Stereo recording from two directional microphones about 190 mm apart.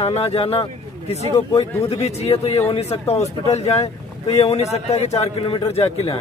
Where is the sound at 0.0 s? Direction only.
30° left (ahead or behind).